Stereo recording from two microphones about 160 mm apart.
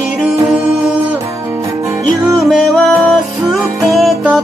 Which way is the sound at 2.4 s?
Centre (ahead or behind).